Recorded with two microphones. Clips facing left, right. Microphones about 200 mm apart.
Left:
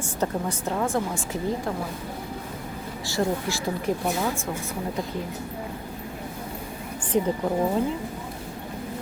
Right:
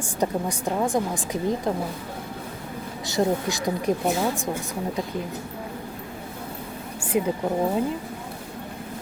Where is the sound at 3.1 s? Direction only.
20° right (ahead or behind).